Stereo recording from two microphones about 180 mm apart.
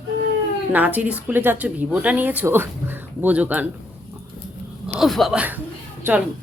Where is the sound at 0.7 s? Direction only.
10° right (ahead or behind).